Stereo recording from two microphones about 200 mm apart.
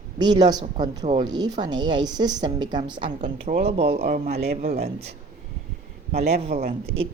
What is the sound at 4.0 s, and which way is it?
Speech, 50° right (ahead or behind).